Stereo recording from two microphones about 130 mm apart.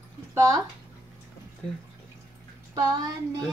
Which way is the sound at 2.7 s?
30° right (ahead or behind).